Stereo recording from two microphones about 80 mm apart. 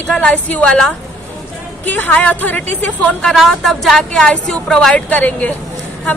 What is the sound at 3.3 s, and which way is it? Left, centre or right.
A woman's voice, centre.